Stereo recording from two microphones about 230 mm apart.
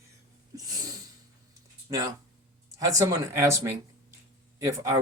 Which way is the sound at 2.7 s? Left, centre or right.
Centre.